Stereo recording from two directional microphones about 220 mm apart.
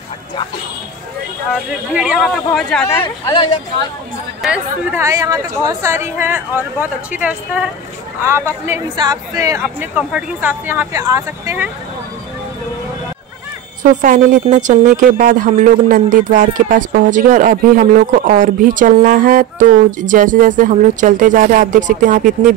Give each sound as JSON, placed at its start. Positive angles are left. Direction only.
{"t": 2.0, "sound": "speech", "side_deg": 0}
{"t": 4.4, "sound": "speech", "side_deg": -10}
{"t": 14.0, "sound": "speech", "side_deg": -35}